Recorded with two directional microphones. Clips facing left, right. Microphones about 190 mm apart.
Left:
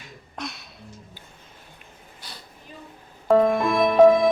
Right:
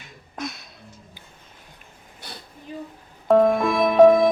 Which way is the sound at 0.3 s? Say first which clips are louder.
Right 3 dB; centre (ahead or behind).